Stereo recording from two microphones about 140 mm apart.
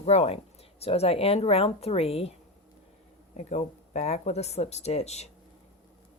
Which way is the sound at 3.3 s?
55° left (ahead or behind).